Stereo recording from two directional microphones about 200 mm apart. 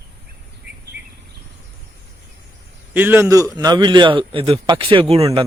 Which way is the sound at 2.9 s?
10° right (ahead or behind).